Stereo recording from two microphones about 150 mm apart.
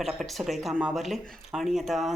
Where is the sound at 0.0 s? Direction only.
Centre (ahead or behind).